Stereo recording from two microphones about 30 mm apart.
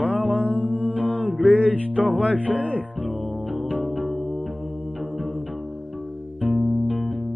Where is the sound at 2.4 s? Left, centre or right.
Right.